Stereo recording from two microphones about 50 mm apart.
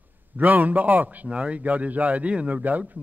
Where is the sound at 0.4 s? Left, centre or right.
Right.